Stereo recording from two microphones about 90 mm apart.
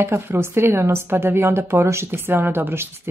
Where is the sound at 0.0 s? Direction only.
25° right (ahead or behind).